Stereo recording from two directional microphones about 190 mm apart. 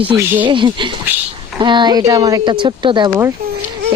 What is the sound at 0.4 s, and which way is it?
Speech, 25° right (ahead or behind).